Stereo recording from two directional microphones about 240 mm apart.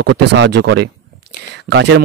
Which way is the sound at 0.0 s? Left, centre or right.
Right.